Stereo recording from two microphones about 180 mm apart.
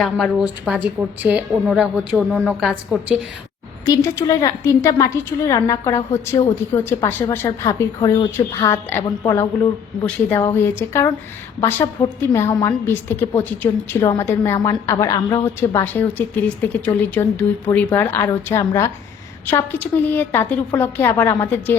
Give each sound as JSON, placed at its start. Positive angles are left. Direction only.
{"t": 0.0, "sound": "a woman's voice", "side_deg": 0}
{"t": 3.8, "sound": "a woman's voice", "side_deg": 15}